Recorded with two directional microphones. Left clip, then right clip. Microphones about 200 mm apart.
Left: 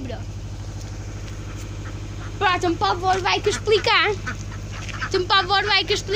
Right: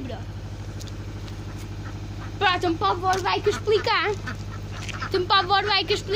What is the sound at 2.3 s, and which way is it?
Speech, 35° left (ahead or behind).